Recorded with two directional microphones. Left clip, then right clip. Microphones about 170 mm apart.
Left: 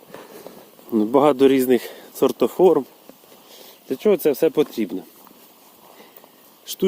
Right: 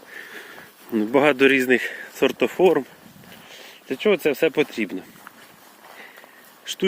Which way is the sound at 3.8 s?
40° left (ahead or behind).